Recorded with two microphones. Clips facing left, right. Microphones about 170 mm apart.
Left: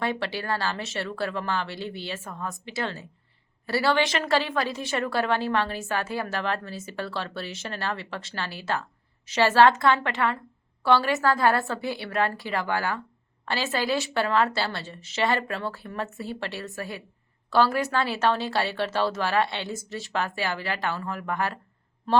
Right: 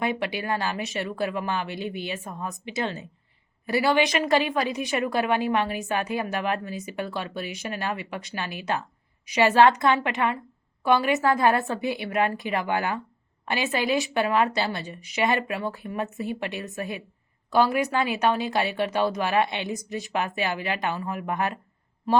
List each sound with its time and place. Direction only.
0.0 s a woman's voice: 15° right (ahead or behind)